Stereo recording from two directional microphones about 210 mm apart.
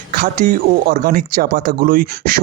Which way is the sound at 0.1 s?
45° right (ahead or behind).